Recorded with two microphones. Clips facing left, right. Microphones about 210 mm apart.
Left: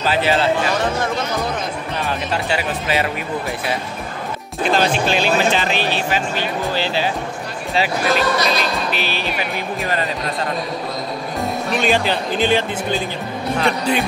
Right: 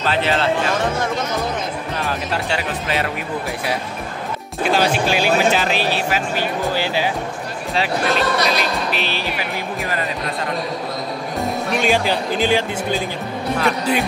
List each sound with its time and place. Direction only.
0.0 s speech: 5° left (ahead or behind)
2.0 s speech: centre (ahead or behind)
4.6 s speech: 10° right (ahead or behind)
7.7 s speech: 5° left (ahead or behind)
9.2 s speech: 25° left (ahead or behind)
11.8 s speech: 10° right (ahead or behind)